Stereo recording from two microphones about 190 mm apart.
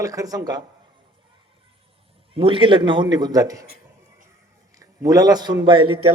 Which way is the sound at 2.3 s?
30° right (ahead or behind).